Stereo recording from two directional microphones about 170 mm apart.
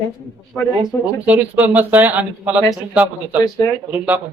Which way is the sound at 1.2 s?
10° right (ahead or behind).